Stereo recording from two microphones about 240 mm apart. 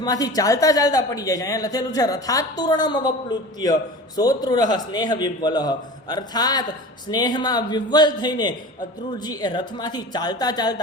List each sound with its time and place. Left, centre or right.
0.0 s a man's voice: centre